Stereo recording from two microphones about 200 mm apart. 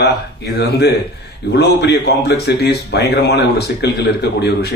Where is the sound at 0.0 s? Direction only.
55° left (ahead or behind).